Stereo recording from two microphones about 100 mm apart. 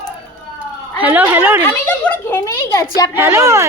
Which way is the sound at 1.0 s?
15° right (ahead or behind).